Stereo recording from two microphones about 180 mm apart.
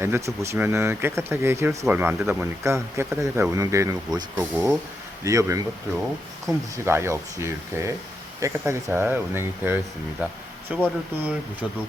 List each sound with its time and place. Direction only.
0.0 s speech: 15° right (ahead or behind)